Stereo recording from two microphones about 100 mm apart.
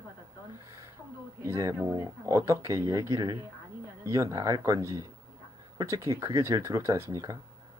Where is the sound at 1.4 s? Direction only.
30° right (ahead or behind).